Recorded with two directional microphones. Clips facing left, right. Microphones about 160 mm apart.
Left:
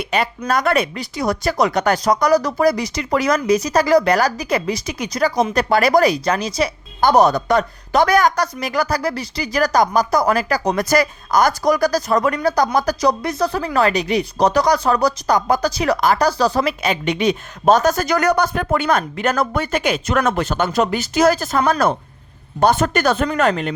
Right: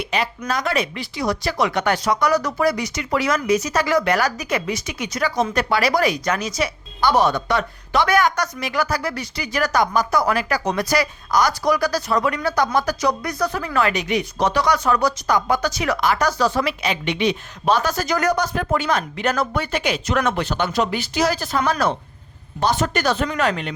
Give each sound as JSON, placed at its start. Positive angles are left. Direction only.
{"t": 0.0, "sound": "speech", "side_deg": 55}
{"t": 5.5, "sound": "speech", "side_deg": 45}